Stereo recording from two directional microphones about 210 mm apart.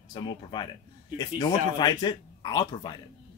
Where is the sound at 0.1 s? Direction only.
20° left (ahead or behind).